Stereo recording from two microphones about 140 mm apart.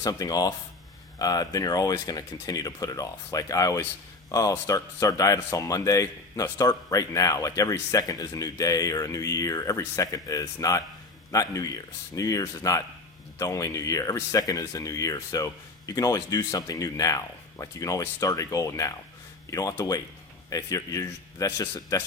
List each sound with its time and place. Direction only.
0.0 s speech: 25° left (ahead or behind)